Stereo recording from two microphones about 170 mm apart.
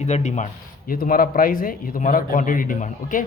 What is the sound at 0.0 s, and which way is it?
Speech, 40° left (ahead or behind).